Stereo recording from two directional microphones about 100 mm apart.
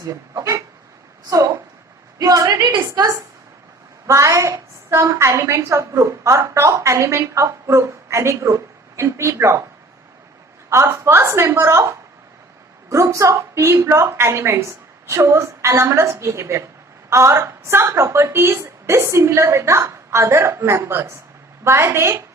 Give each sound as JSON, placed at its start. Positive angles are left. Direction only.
{"t": 0.1, "sound": "a woman's voice", "side_deg": -30}
{"t": 10.7, "sound": "a woman's voice", "side_deg": -25}